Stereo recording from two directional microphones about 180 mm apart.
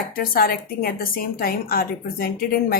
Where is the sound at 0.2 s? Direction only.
55° left (ahead or behind).